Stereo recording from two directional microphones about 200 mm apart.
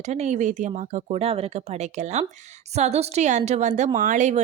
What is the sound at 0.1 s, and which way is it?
A woman's voice, 35° right (ahead or behind).